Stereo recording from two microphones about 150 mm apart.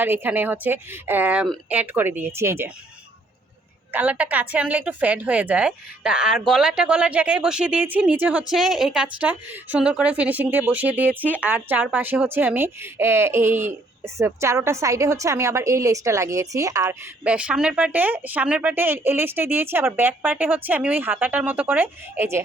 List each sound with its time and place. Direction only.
0.0 s a woman's voice: 15° right (ahead or behind)
3.9 s a woman's voice: 10° right (ahead or behind)
17.2 s a woman's voice: 10° right (ahead or behind)